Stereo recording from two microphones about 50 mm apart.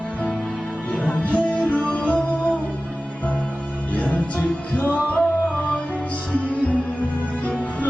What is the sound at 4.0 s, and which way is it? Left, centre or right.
Music, left.